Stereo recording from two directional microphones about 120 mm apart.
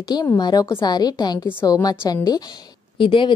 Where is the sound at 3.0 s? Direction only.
45° left (ahead or behind).